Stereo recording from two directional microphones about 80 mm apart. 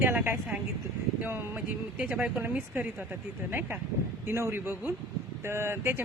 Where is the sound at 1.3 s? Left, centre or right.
Right.